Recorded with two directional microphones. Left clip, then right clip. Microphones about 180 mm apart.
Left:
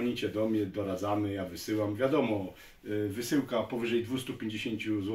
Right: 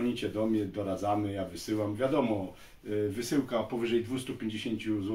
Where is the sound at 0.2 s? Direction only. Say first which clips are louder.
Left 1 dB; 20° left (ahead or behind).